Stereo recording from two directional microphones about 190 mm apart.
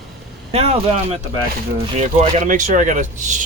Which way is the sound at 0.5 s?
35° right (ahead or behind).